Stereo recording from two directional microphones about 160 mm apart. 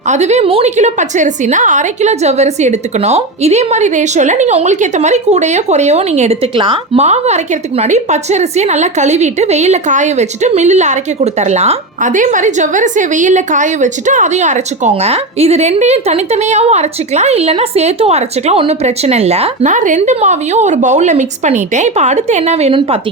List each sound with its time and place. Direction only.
0.1 s a woman's voice: 45° right (ahead or behind)